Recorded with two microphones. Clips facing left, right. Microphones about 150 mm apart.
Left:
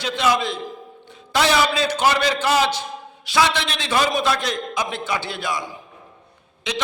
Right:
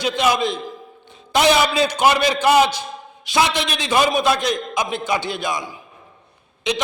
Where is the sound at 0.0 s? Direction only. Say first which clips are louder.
Right 2 dB; 15° right (ahead or behind).